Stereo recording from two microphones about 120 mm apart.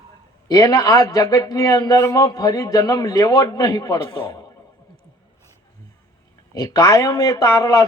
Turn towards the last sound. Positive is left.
turn(degrees=25)  # may be behind; listen again after turning